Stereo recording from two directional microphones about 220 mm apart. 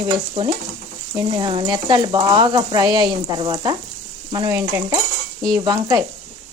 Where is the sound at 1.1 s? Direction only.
20° right (ahead or behind).